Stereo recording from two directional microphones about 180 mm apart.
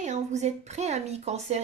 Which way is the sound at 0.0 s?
40° right (ahead or behind).